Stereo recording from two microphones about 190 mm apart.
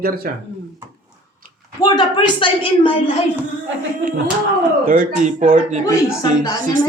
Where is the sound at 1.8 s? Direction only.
20° left (ahead or behind).